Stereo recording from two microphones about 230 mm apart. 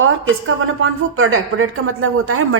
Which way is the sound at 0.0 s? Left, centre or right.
Right.